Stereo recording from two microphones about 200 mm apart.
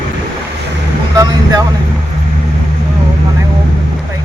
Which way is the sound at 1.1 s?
20° right (ahead or behind).